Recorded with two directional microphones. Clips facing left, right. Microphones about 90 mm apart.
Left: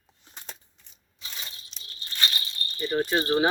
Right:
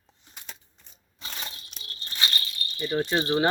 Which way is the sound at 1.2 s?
55° right (ahead or behind).